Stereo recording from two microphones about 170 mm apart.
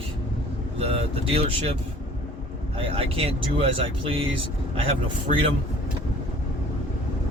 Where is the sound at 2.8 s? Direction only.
35° right (ahead or behind).